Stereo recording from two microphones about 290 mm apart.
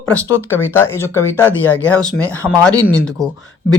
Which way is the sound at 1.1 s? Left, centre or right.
Centre.